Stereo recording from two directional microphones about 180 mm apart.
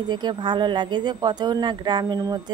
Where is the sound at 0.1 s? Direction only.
25° right (ahead or behind).